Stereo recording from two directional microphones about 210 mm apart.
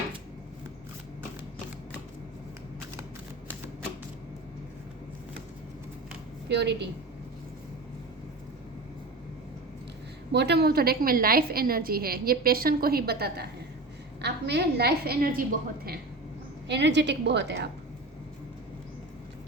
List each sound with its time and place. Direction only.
6.5 s a woman's voice: 55° right (ahead or behind)
10.3 s a woman's voice: 50° right (ahead or behind)
16.6 s a woman's voice: 55° right (ahead or behind)